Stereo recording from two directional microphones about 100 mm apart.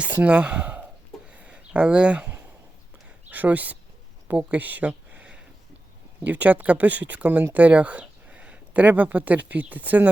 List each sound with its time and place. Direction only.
0.0 s speech: 15° right (ahead or behind)
1.3 s a sound: 10° right (ahead or behind)
3.2 s speech: 15° right (ahead or behind)